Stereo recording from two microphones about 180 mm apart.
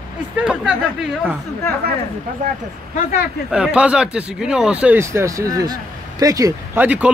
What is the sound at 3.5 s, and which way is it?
Speech, 5° right (ahead or behind).